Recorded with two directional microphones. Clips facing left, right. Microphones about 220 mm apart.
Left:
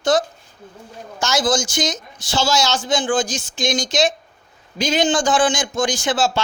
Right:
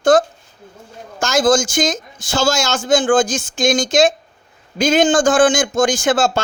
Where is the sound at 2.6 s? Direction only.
45° right (ahead or behind).